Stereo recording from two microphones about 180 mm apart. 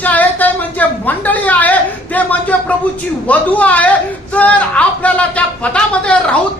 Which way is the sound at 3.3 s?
10° left (ahead or behind).